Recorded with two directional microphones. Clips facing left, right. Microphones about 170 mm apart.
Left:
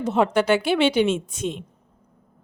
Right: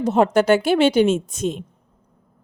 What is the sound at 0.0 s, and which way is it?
A woman's voice, 45° right (ahead or behind).